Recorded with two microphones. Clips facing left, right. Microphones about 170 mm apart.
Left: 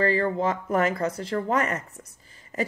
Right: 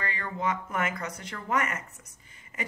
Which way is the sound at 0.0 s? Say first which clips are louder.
Left 9 dB; 35° left (ahead or behind).